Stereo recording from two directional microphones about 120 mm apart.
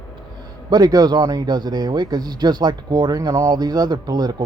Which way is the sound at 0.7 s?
30° right (ahead or behind).